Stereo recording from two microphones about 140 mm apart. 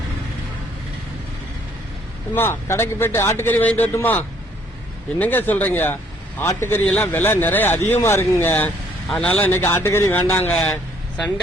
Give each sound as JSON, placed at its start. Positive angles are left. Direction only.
{"t": 2.3, "sound": "a man's voice", "side_deg": 15}